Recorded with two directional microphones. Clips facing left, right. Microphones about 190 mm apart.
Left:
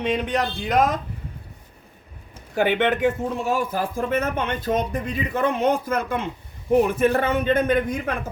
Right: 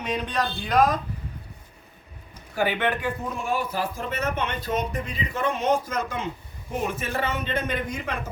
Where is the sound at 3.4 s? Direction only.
45° left (ahead or behind).